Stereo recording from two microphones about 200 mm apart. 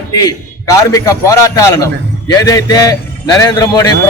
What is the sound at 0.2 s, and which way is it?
A man's voice, 15° left (ahead or behind).